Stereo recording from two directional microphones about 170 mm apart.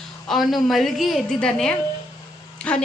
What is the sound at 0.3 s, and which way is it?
A woman's voice, centre (ahead or behind).